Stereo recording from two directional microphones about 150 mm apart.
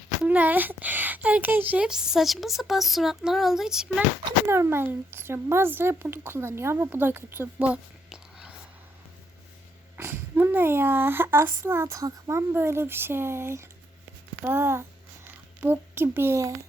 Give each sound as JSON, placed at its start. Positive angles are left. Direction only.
{"t": 0.3, "sound": "speech", "side_deg": -10}
{"t": 4.4, "sound": "a child's voice", "side_deg": -15}
{"t": 10.0, "sound": "a child's voice", "side_deg": -15}